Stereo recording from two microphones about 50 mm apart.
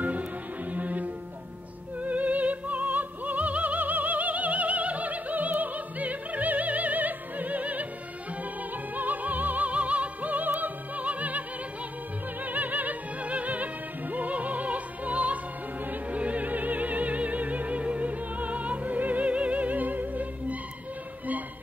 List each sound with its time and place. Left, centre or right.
0.7 s music: right
8.9 s music: right
12.4 s music: right
14.1 s opera: right
15.9 s music: right